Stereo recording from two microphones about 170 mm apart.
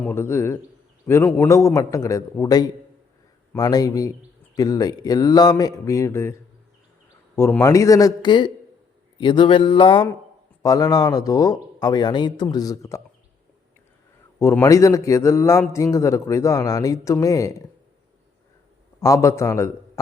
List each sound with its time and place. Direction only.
0.0 s a man's voice: 15° left (ahead or behind)
7.3 s speech: 15° left (ahead or behind)
9.1 s a sound: 30° left (ahead or behind)
10.6 s speech: 20° left (ahead or behind)
14.3 s a man's voice: 15° left (ahead or behind)
18.9 s a man's voice: 20° left (ahead or behind)